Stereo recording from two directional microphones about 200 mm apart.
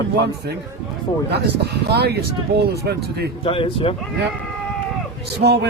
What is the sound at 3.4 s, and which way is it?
Speech, 25° left (ahead or behind).